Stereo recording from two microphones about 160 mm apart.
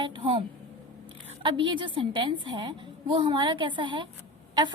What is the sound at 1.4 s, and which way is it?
A woman's voice, 30° right (ahead or behind).